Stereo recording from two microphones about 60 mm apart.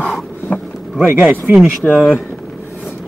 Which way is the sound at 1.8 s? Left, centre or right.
Left.